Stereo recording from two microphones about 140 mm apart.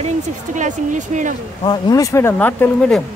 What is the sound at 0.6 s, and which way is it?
Speech, 60° right (ahead or behind).